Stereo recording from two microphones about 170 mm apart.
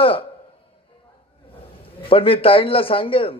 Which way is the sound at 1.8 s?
35° left (ahead or behind).